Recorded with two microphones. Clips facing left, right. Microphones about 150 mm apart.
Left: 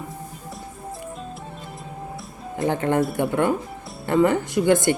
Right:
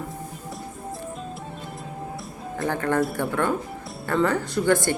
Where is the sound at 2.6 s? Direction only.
20° left (ahead or behind).